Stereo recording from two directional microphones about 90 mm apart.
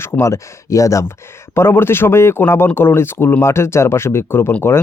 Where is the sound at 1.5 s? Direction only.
25° left (ahead or behind).